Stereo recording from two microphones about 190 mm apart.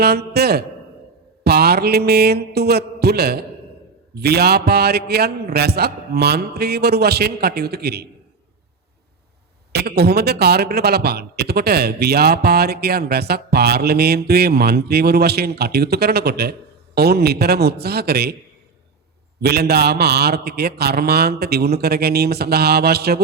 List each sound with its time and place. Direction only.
0.0 s a man's voice: 55° right (ahead or behind)
1.5 s mantra: 55° right (ahead or behind)
4.1 s a man's voice: 55° right (ahead or behind)
9.7 s a man's voice: 60° right (ahead or behind)
19.4 s a man's voice: 55° right (ahead or behind)